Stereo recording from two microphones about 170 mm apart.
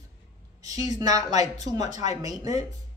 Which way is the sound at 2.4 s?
40° left (ahead or behind).